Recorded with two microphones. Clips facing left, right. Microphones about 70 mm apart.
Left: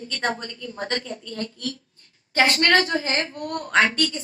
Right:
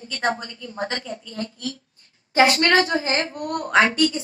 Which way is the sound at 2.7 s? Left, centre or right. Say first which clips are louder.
Right 1 dB; right.